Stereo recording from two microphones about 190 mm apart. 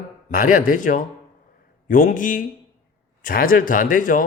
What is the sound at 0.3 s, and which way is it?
Speech, 45° left (ahead or behind).